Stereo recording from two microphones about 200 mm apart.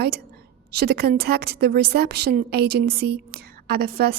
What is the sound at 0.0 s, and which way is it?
A woman's voice, 50° right (ahead or behind).